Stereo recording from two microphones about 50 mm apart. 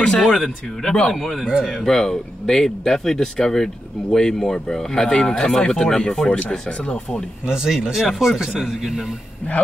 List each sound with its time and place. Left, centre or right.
0.2 s speech: centre
1.4 s speech: centre
1.8 s speech: centre
7.4 s speech: centre